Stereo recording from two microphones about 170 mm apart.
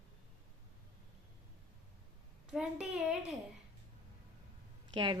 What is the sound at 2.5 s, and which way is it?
Speech, 5° right (ahead or behind).